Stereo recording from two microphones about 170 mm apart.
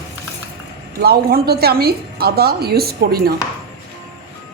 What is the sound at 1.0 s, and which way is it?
A woman's voice, 65° right (ahead or behind).